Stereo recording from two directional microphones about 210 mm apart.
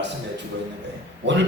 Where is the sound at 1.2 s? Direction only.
55° right (ahead or behind).